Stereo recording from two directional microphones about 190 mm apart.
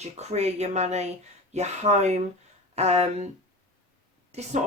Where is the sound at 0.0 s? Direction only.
35° right (ahead or behind).